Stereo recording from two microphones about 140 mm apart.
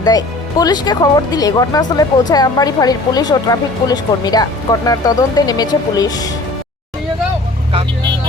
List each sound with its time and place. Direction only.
0.0 s a woman's voice: 25° left (ahead or behind)